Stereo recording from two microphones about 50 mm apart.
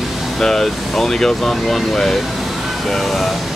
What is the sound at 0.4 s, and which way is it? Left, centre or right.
Speech, centre.